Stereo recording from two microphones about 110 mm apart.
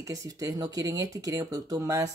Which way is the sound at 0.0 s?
30° right (ahead or behind).